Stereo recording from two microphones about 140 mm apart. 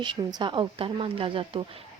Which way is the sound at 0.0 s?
30° right (ahead or behind).